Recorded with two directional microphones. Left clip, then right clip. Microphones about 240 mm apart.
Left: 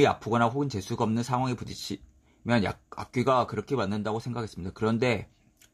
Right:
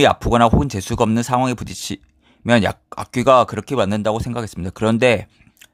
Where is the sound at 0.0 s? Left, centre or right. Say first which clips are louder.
Right 10 dB; right.